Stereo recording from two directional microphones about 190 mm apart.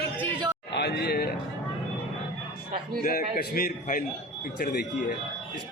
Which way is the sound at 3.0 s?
50° left (ahead or behind).